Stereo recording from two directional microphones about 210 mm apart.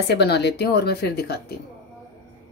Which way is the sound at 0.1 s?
50° left (ahead or behind).